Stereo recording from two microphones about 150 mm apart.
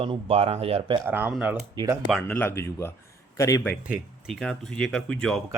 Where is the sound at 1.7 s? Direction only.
30° right (ahead or behind).